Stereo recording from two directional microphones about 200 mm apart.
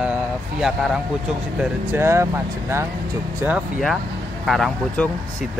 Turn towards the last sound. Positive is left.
turn(degrees=0)  # may be behind; listen again after turning